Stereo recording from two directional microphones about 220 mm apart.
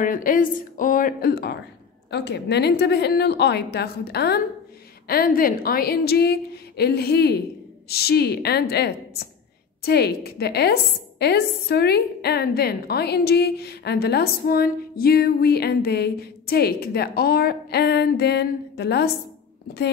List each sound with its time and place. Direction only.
0.0 s a woman's voice: 40° left (ahead or behind)